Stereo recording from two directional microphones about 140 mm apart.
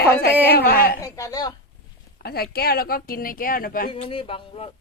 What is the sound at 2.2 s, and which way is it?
Speech, 90° left.